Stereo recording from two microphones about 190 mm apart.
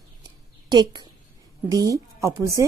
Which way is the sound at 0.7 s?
25° right (ahead or behind).